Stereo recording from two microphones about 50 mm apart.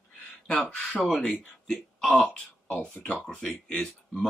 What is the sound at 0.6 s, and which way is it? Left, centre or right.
Speech, centre.